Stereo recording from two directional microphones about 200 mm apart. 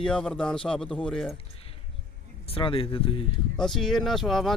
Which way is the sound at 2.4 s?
25° left (ahead or behind).